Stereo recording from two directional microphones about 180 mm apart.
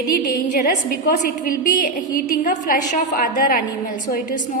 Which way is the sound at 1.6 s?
50° left (ahead or behind).